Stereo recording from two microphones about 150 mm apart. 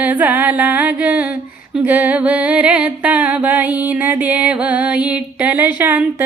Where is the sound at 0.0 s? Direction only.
10° right (ahead or behind).